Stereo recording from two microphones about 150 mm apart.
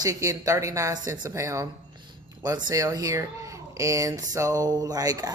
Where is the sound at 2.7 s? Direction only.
25° right (ahead or behind).